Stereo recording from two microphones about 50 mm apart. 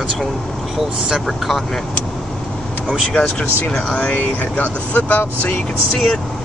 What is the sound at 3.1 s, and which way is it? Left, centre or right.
Speech, centre.